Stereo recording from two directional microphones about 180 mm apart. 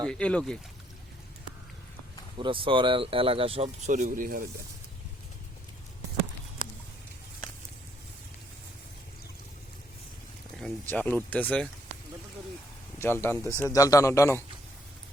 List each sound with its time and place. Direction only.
0.0 s speech: 5° left (ahead or behind)
2.4 s speech: 30° right (ahead or behind); by 4.4 s 50° right (ahead or behind)
10.6 s speech: 10° left (ahead or behind)
13.0 s speech: 15° left (ahead or behind)